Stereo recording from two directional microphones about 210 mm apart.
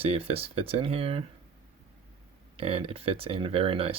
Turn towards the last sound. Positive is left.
turn(degrees=-25)  # may be behind; listen again after turning